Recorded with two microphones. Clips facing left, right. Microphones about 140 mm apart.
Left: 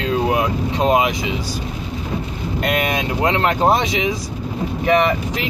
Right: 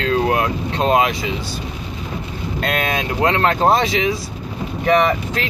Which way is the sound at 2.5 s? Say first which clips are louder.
Left 1 dB; 15° left (ahead or behind).